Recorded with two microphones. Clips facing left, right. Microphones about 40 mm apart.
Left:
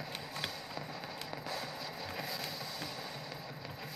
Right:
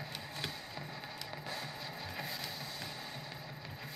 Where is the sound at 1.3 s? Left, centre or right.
Centre.